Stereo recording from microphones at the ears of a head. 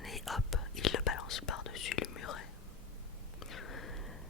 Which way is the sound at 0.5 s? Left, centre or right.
Left.